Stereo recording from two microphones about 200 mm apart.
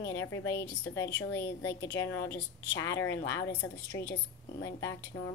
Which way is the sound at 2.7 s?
60° left (ahead or behind).